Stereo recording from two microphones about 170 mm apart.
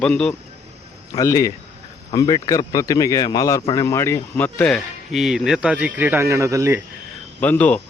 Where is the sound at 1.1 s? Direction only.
20° left (ahead or behind); by 6.8 s 15° right (ahead or behind).